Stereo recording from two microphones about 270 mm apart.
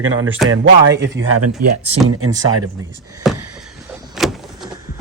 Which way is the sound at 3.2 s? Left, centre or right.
Centre.